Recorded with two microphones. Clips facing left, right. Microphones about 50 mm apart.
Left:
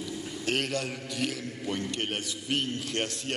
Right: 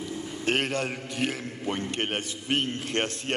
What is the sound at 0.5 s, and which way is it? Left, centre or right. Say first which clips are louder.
A man's voice: right 3 dB; right.